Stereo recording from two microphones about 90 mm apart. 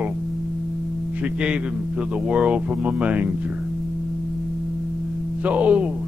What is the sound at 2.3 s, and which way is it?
A man's voice, 15° right (ahead or behind).